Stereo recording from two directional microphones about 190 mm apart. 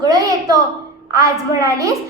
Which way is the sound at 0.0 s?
20° right (ahead or behind).